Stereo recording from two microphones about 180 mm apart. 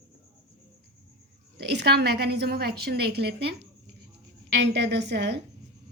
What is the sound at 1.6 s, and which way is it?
A woman's voice, 60° right (ahead or behind).